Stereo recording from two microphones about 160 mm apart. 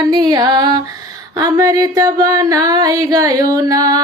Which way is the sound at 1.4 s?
20° right (ahead or behind).